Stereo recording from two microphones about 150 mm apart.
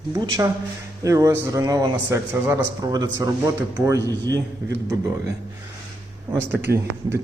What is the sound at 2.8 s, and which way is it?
A man's voice, 25° right (ahead or behind).